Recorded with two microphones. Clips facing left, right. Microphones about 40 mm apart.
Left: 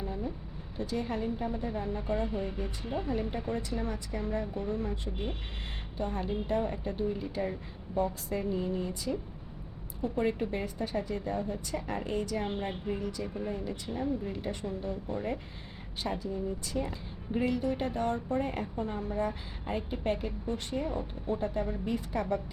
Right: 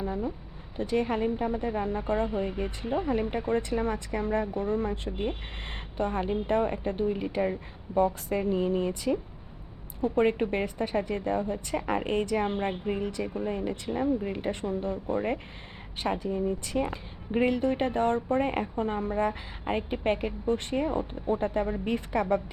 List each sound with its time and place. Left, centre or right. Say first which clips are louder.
0.0 s a sound: right 5 dB; right
0.8 s a woman's voice: right 6 dB; right
3.0 s a woman's voice: right 4 dB; right
11.9 s a woman's voice: right 6 dB; right
13.2 s speech: right 4 dB; right
13.5 s a woman's voice: right 5 dB; right